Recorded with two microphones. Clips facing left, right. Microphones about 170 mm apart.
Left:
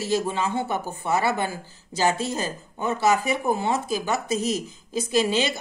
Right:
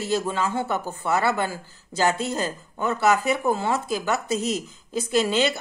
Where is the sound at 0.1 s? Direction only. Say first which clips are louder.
Even; 15° left (ahead or behind).